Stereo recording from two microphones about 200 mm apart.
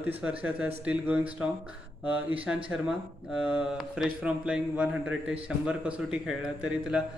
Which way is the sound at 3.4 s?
5° right (ahead or behind).